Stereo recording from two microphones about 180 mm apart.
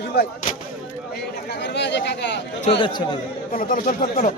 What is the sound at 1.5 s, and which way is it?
Speech, 75° left (ahead or behind).